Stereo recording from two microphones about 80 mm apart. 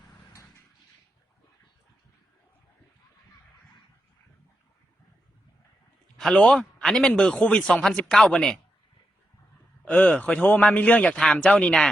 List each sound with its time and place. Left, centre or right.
6.1 s a man's voice: centre
9.8 s a man's voice: centre